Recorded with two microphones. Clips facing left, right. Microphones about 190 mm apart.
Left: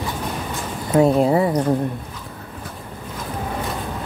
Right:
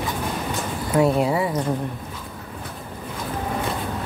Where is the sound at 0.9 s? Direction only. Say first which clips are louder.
Left 4 dB; 25° left (ahead or behind).